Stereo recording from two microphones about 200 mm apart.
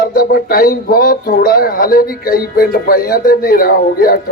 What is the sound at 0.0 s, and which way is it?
Speech, 50° left (ahead or behind).